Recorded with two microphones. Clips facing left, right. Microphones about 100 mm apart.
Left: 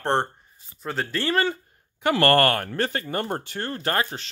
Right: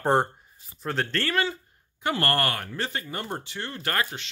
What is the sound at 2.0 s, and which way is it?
Speech, 75° left (ahead or behind).